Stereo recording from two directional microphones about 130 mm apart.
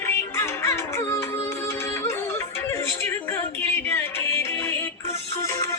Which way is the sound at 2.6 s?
20° left (ahead or behind).